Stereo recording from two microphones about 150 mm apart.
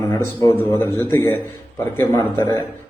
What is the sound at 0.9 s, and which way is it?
Speech, 20° left (ahead or behind).